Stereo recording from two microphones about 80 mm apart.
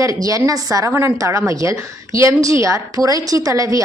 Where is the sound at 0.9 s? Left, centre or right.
Right.